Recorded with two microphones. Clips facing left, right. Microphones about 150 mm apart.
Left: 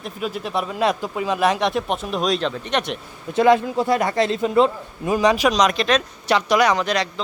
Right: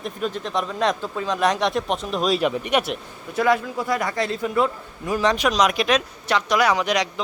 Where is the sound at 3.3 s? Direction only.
25° left (ahead or behind).